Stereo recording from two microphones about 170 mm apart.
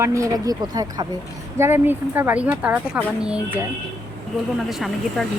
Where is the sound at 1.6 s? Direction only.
15° right (ahead or behind).